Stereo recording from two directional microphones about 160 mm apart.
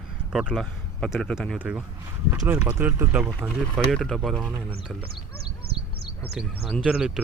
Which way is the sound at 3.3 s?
5° left (ahead or behind).